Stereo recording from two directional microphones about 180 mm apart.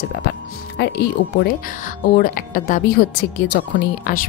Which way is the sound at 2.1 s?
50° left (ahead or behind).